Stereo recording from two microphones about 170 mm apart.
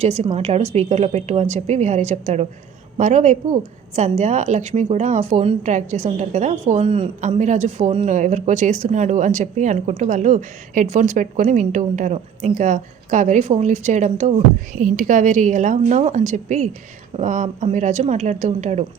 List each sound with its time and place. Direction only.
0.0 s a woman's voice: 35° right (ahead or behind)